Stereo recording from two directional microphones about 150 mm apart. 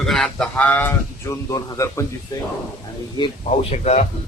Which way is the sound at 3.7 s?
45° left (ahead or behind).